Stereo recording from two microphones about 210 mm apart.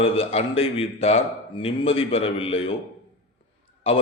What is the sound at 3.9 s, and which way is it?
Speech, 25° left (ahead or behind).